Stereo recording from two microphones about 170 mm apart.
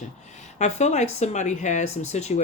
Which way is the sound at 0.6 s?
40° left (ahead or behind).